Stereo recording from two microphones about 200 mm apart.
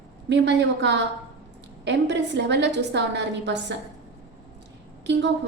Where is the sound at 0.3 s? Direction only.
60° right (ahead or behind).